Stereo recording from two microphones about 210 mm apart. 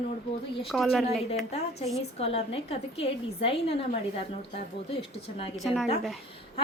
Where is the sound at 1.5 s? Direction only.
30° left (ahead or behind).